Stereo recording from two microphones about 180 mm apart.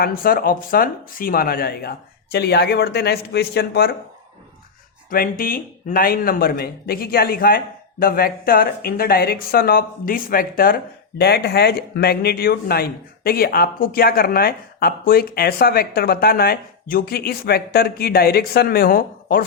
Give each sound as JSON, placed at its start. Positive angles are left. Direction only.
{"t": 0.0, "sound": "speech", "side_deg": 55}
{"t": 5.1, "sound": "a man's voice", "side_deg": 55}
{"t": 11.2, "sound": "speech", "side_deg": 65}